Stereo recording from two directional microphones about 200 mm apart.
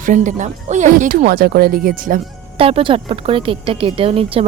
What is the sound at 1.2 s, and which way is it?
Speech, 50° right (ahead or behind).